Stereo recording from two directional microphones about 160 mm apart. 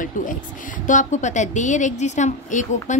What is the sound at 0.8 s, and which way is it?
A woman's voice, 50° left (ahead or behind).